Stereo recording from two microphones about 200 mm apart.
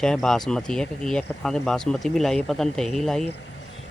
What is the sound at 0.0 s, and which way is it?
Speech, 5° left (ahead or behind).